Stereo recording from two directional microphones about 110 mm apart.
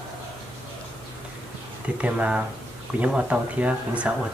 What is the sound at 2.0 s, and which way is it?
Speech, 10° right (ahead or behind).